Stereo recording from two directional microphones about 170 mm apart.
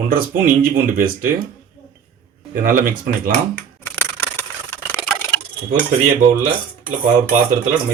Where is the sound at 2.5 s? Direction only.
55° right (ahead or behind).